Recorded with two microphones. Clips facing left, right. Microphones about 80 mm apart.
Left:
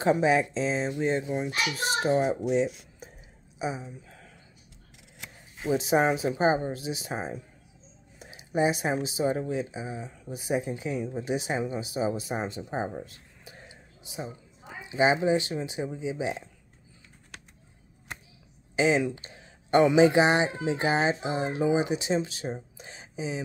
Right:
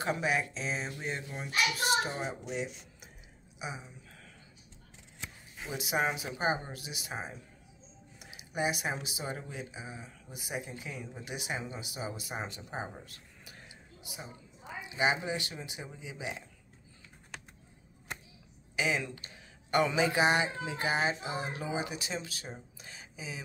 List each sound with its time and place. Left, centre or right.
0.0 s speech: left
2.5 s speech: left
5.6 s speech: left
14.8 s speech: left
18.8 s speech: left